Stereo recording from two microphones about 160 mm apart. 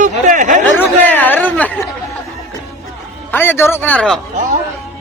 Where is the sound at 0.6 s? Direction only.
10° left (ahead or behind).